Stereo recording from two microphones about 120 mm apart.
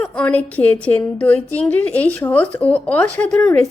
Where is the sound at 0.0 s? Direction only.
10° left (ahead or behind).